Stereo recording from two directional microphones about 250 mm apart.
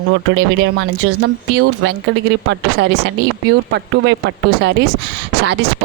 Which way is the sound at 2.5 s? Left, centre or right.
Right.